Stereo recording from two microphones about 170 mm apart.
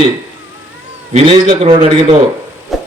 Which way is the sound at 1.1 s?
30° right (ahead or behind).